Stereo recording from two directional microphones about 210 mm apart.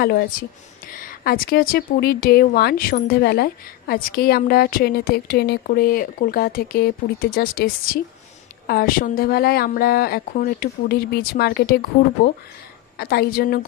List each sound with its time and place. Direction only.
0.0 s speech: 45° left (ahead or behind)